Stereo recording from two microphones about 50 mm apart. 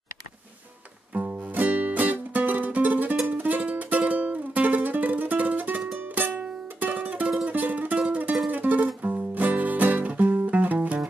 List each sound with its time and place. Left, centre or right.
1.1 s music: right